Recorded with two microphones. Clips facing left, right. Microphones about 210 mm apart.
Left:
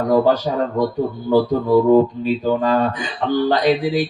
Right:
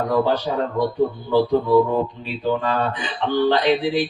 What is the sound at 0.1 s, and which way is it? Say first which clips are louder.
Speech: left 6 dB; 45° left (ahead or behind).